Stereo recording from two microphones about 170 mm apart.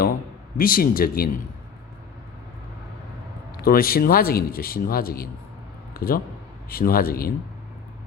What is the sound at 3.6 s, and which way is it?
Speech, 60° left (ahead or behind).